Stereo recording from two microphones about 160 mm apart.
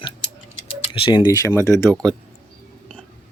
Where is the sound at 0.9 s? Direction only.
30° left (ahead or behind).